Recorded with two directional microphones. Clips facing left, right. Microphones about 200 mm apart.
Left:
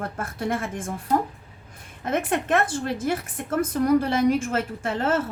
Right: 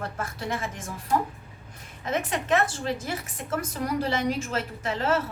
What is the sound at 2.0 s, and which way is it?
Speech, 55° left (ahead or behind).